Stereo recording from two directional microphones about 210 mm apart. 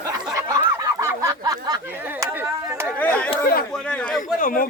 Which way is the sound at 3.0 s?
5° left (ahead or behind).